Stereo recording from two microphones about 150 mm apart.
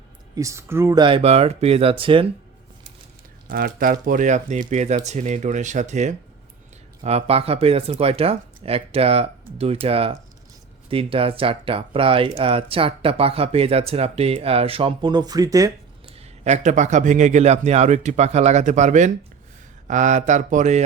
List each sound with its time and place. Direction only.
0.3 s speech: 20° right (ahead or behind)
0.9 s speech: 35° right (ahead or behind)
3.4 s a man's voice: 75° right (ahead or behind); by 15.7 s 20° right (ahead or behind)
16.1 s a man's voice: 50° right (ahead or behind)